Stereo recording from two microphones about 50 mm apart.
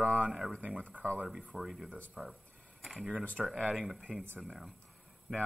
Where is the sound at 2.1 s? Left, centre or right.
Centre.